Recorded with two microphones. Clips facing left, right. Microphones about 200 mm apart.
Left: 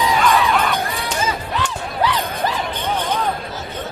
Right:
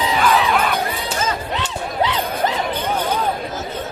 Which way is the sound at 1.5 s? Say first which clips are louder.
Right 1 dB; 20° right (ahead or behind).